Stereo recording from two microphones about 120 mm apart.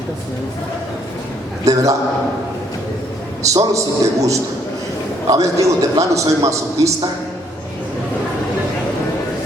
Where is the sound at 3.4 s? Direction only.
25° right (ahead or behind).